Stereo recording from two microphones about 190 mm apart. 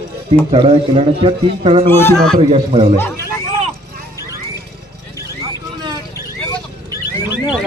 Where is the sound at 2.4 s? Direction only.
30° right (ahead or behind).